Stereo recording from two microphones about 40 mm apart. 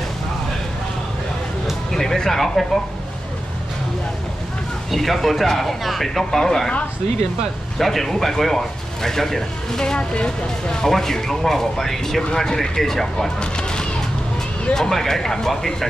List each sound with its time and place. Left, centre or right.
1.9 s music: centre
4.9 s speech: centre
7.8 s speech: centre
9.9 s speech: left
10.8 s speech: centre
13.4 s a sound: left
14.7 s speech: centre